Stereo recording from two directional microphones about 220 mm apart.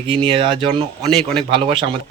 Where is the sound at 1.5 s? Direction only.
25° right (ahead or behind).